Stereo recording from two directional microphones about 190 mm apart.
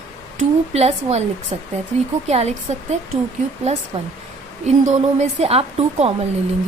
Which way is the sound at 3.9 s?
30° right (ahead or behind).